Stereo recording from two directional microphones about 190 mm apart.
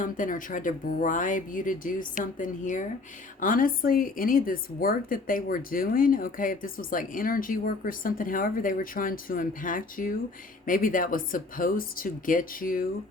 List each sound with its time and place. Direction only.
0.0 s a woman's voice: 45° left (ahead or behind)